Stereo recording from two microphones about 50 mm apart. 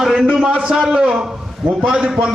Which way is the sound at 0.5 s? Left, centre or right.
Right.